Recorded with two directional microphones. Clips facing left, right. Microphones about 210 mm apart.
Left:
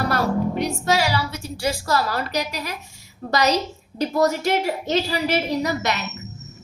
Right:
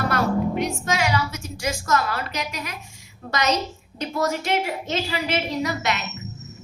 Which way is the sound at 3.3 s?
35° left (ahead or behind).